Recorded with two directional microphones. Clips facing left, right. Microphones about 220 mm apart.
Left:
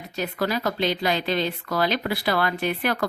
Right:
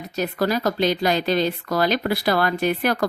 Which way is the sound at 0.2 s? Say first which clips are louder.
Right 4 dB; 40° right (ahead or behind).